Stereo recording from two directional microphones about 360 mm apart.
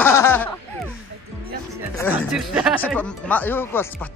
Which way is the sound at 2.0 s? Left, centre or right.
Centre.